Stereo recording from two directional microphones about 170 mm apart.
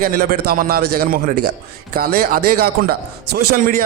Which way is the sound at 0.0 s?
60° right (ahead or behind).